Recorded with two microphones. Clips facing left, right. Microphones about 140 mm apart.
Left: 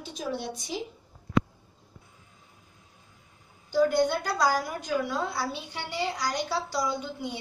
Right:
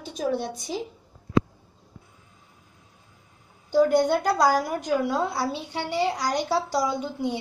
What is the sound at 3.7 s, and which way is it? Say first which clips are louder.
A woman's voice: right 4 dB; 40° right (ahead or behind).